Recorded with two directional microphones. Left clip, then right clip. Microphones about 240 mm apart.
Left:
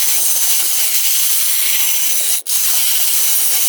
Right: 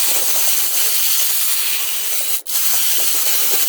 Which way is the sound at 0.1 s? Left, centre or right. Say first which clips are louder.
Left 2 dB; centre.